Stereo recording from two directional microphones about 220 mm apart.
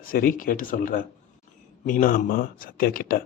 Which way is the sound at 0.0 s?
40° left (ahead or behind).